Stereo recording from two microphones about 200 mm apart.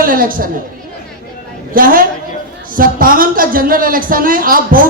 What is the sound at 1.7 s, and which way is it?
A woman's voice, 45° right (ahead or behind).